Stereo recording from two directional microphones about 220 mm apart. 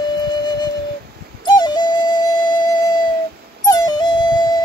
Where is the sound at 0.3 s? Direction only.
20° left (ahead or behind).